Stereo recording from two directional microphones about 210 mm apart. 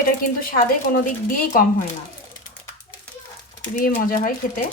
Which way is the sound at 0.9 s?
40° left (ahead or behind).